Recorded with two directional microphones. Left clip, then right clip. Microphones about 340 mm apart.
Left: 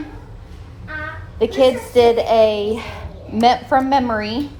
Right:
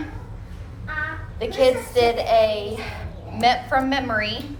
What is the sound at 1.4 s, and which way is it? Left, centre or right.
A woman's voice, centre.